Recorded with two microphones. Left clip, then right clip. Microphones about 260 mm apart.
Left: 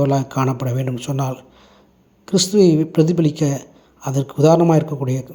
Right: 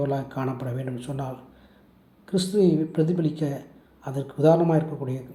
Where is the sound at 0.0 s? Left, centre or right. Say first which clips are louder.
Left 9 dB; left.